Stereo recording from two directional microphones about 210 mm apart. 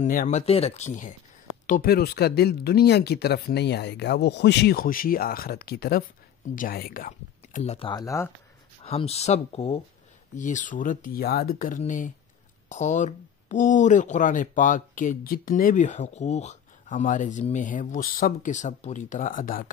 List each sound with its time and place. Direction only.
0.0 s speech: 40° left (ahead or behind)
7.9 s speech: 15° left (ahead or behind)
8.8 s speech: 30° left (ahead or behind)